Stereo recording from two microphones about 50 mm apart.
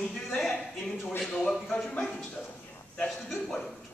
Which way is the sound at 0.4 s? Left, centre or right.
Centre.